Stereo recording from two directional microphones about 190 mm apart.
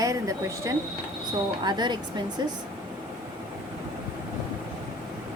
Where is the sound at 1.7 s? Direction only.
20° right (ahead or behind).